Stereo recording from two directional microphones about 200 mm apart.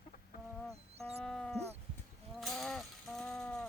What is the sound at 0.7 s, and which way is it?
Bird, 30° right (ahead or behind).